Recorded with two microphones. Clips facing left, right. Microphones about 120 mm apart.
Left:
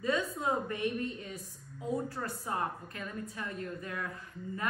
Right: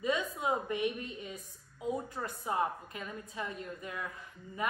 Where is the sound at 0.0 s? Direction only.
20° right (ahead or behind).